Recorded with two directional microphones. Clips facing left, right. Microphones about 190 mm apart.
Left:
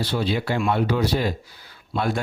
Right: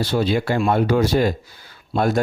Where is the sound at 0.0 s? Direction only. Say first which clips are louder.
Right 4 dB; 45° right (ahead or behind).